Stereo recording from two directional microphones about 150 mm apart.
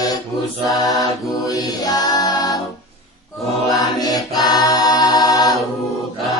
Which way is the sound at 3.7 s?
25° left (ahead or behind).